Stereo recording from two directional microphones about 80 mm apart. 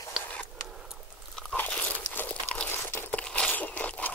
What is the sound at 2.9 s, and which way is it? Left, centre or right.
Crushing, centre.